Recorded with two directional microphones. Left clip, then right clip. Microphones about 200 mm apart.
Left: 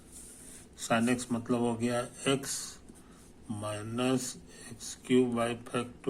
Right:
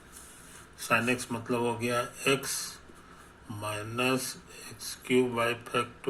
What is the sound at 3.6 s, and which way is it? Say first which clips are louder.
Speech: right 3 dB; 30° left (ahead or behind).